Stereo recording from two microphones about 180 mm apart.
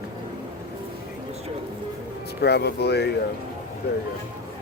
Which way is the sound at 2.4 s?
65° left (ahead or behind).